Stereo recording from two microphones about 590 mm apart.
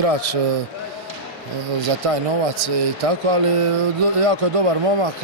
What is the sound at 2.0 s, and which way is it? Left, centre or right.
Speech, right.